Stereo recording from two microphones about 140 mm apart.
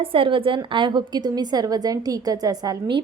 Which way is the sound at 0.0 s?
40° right (ahead or behind).